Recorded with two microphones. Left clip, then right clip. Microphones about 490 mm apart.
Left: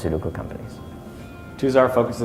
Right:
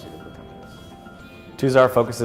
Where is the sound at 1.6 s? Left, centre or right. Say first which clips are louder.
Right 1 dB; right.